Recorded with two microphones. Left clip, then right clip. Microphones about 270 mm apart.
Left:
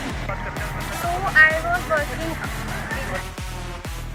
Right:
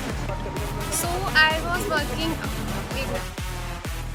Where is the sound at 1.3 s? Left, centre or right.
Centre.